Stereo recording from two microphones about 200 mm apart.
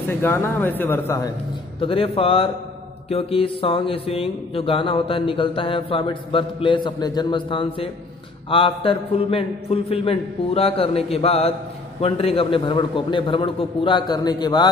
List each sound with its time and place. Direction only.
0.2 s a man's voice: 10° left (ahead or behind)
1.8 s music: 25° left (ahead or behind)